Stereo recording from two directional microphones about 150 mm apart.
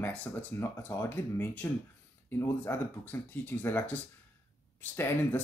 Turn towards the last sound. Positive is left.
turn(degrees=15)  # may be behind; listen again after turning